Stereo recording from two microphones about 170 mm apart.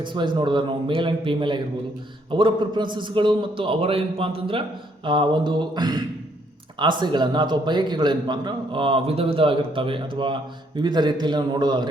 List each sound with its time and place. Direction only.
0.0 s a man's voice: 30° right (ahead or behind)